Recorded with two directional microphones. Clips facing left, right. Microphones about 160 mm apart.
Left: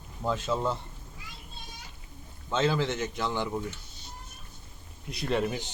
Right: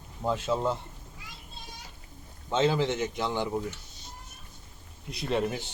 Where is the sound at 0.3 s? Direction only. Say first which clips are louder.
Right 1 dB; 10° right (ahead or behind).